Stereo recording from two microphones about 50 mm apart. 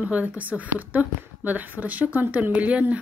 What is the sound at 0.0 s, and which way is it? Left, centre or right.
Speech, right.